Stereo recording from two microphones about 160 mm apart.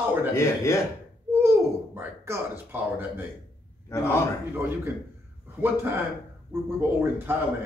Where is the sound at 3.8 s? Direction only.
15° left (ahead or behind).